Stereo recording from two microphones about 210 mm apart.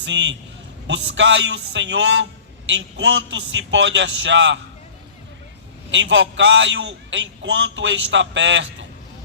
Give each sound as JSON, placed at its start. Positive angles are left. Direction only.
{"t": 0.0, "sound": "a man's voice", "side_deg": -60}
{"t": 5.9, "sound": "a man's voice", "side_deg": -60}